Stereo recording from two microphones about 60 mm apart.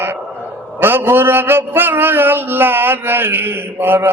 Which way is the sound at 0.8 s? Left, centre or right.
Right.